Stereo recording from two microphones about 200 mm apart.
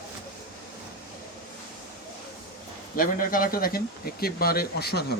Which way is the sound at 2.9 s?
45° left (ahead or behind).